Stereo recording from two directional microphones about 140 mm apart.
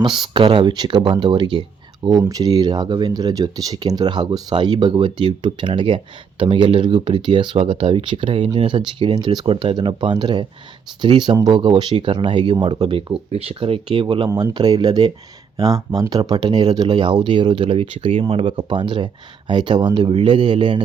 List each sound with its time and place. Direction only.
0.0 s speech: 35° right (ahead or behind)
14.3 s speech: 25° right (ahead or behind)